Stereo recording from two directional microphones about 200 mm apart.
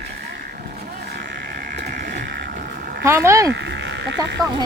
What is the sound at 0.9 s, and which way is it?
Sheep, 55° right (ahead or behind).